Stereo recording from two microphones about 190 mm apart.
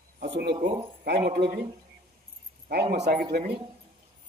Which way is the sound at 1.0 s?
60° right (ahead or behind).